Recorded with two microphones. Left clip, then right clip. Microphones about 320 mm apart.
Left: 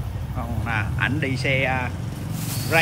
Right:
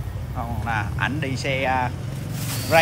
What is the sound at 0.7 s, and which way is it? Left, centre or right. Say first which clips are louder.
Speech: left 1 dB; centre.